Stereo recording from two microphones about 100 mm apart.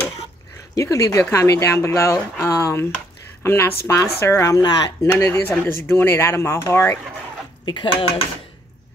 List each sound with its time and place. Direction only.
0.7 s speech: 30° left (ahead or behind)
5.0 s speech: 30° left (ahead or behind)
7.6 s speech: 55° left (ahead or behind)